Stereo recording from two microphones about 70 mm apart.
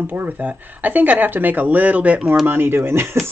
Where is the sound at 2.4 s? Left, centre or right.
Right.